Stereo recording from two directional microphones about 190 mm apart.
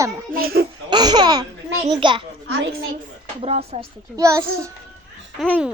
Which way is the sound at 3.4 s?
35° right (ahead or behind).